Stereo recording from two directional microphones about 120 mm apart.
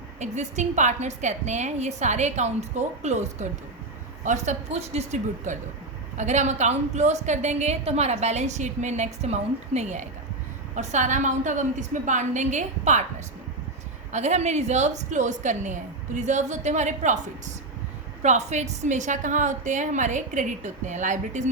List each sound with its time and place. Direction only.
0.2 s a woman's voice: 75° right (ahead or behind)
4.2 s a woman's voice: 85° right
14.1 s a woman's voice: 70° right (ahead or behind)
18.2 s a woman's voice: 75° right (ahead or behind)